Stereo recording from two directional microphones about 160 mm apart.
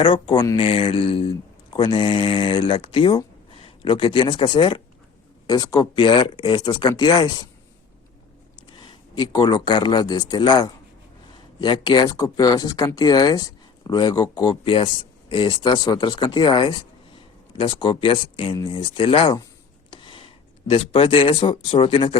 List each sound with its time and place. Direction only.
0.0 s speech: 30° left (ahead or behind)
8.8 s a man's voice: 30° left (ahead or behind)